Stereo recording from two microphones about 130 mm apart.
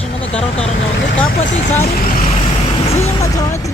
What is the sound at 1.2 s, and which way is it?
Speech, 65° left (ahead or behind).